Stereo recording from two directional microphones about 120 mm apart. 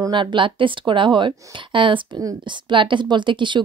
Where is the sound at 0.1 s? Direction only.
40° right (ahead or behind).